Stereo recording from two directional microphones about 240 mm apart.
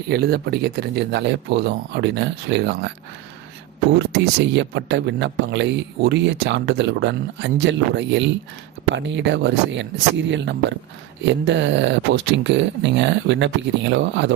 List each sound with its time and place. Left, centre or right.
0.1 s speech: right
3.9 s speech: right